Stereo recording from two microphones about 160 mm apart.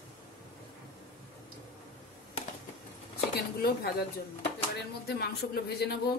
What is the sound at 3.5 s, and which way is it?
Speech, 80° left.